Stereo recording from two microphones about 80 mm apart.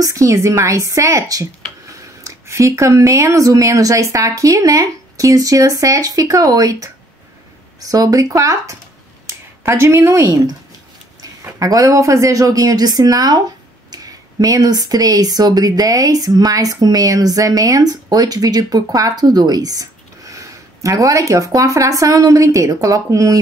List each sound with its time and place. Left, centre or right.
0.0 s a woman's voice: right
7.9 s speech: right
11.6 s speech: right